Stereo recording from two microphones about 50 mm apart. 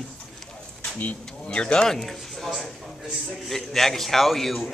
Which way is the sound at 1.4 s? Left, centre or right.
Centre.